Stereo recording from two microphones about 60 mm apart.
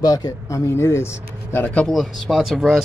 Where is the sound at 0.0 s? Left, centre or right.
Left.